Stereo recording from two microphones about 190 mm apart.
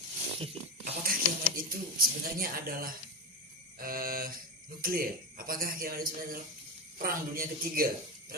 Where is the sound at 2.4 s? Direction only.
50° right (ahead or behind).